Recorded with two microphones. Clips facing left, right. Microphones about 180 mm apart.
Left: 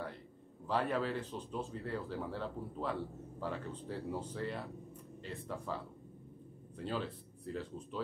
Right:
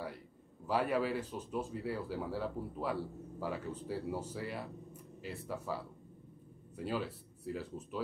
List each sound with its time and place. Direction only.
0.7 s speech: 10° right (ahead or behind)
6.8 s speech: 10° right (ahead or behind)